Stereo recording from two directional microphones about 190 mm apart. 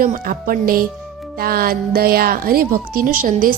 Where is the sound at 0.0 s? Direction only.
50° right (ahead or behind).